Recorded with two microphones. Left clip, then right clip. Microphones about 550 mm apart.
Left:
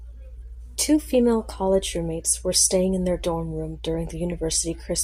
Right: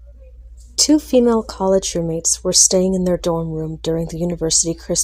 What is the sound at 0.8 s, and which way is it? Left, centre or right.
Speech, left.